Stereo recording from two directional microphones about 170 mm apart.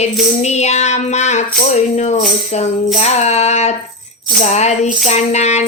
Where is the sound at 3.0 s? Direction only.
40° left (ahead or behind).